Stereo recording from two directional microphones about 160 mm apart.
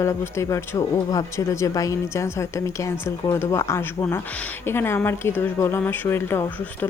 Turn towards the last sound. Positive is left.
turn(degrees=15)  # may be behind; listen again after turning